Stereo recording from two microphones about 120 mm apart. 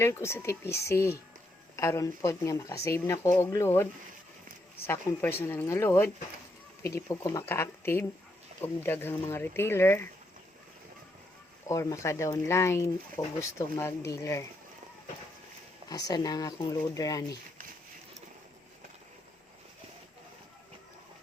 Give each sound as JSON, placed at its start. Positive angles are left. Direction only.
{"t": 0.0, "sound": "speech", "side_deg": 20}
{"t": 4.9, "sound": "speech", "side_deg": 20}
{"t": 11.7, "sound": "speech", "side_deg": 25}
{"t": 15.9, "sound": "speech", "side_deg": 30}